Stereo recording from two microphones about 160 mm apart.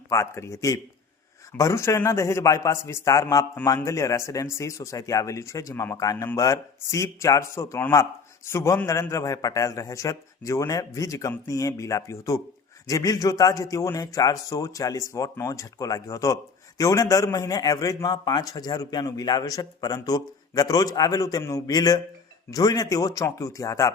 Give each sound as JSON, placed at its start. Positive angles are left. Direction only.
{"t": 0.1, "sound": "a man's voice", "side_deg": 20}